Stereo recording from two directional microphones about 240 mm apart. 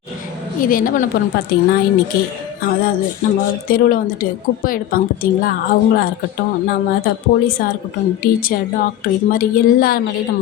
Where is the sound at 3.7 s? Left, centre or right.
Left.